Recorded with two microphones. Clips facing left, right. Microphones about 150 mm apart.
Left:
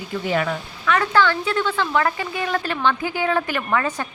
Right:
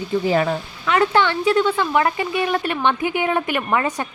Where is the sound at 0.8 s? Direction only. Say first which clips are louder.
Right 1 dB; 20° right (ahead or behind).